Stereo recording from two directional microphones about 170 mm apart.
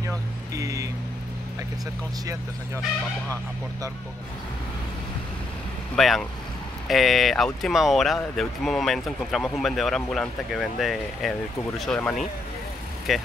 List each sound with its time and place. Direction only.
0.6 s speech: 20° right (ahead or behind)
5.9 s speech: centre (ahead or behind)